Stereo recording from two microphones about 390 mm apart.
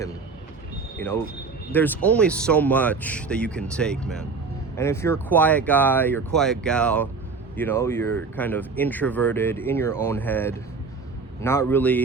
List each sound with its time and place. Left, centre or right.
0.9 s speech: centre